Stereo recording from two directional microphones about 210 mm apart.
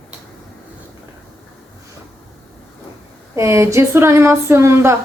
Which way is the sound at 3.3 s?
15° right (ahead or behind).